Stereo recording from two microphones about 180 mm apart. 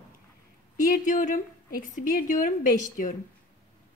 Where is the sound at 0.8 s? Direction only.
45° left (ahead or behind).